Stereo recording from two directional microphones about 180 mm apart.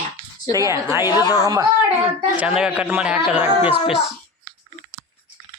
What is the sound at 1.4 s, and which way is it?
Speech, 20° right (ahead or behind).